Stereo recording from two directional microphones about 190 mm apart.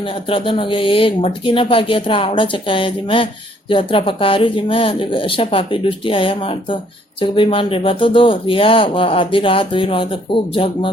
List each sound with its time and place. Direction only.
0.0 s speech: 30° left (ahead or behind)